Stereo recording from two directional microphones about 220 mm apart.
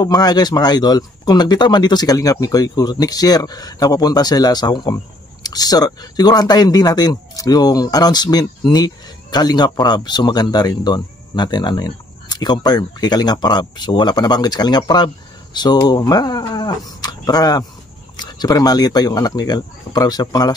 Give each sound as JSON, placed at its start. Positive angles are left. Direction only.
{"t": 0.0, "sound": "speech", "side_deg": 20}